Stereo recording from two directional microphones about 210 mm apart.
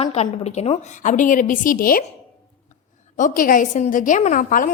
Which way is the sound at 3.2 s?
40° left (ahead or behind).